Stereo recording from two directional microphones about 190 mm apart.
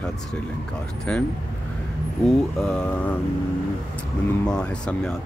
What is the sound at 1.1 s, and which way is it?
Speech, 5° left (ahead or behind).